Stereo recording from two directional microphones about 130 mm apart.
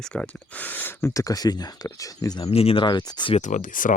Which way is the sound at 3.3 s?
70° left (ahead or behind).